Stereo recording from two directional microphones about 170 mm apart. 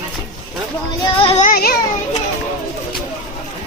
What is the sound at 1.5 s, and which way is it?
Child singing, 60° left (ahead or behind).